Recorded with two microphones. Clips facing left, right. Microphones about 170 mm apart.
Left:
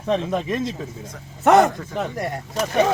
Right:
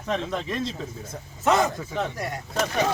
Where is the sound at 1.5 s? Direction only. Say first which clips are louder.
Left 7 dB; 60° left (ahead or behind).